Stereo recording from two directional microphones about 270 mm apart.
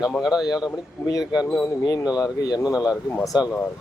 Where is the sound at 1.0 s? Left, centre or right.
Centre.